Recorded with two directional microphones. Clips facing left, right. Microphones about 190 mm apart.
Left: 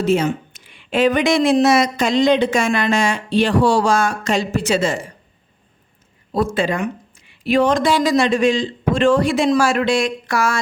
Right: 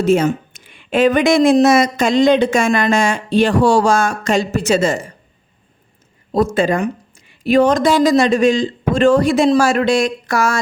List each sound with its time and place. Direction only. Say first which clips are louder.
0.0 s speech: right 3 dB; 50° right (ahead or behind)
6.3 s speech: right 4 dB; 45° right (ahead or behind)